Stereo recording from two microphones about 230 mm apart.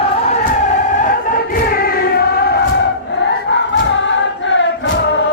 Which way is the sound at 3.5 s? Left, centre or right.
Left.